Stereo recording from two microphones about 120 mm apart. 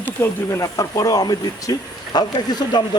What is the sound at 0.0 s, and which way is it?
Speech, 20° left (ahead or behind).